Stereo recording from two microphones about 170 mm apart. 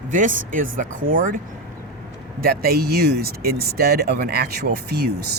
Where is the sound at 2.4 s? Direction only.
60° right (ahead or behind).